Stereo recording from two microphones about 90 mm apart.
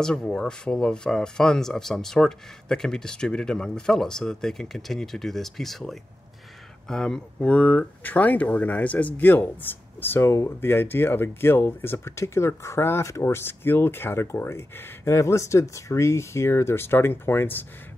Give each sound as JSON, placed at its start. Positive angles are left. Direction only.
{"t": 0.0, "sound": "speech", "side_deg": 5}